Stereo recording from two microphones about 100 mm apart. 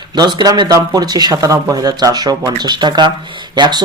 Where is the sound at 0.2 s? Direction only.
45° right (ahead or behind).